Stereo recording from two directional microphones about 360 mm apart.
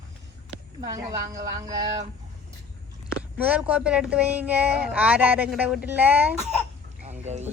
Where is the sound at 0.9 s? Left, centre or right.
Centre.